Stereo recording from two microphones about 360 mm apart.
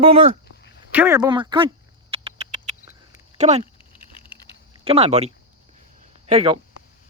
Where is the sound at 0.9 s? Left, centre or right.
Centre.